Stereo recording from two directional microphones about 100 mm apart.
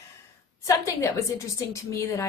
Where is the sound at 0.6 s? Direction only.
35° left (ahead or behind).